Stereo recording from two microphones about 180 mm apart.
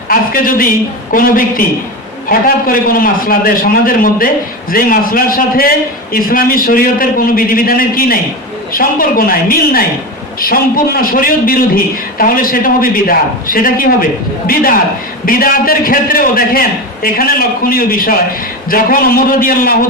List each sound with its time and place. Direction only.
0.1 s a man's voice: 50° left (ahead or behind)